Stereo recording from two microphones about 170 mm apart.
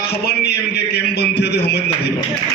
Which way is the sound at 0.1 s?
75° left (ahead or behind).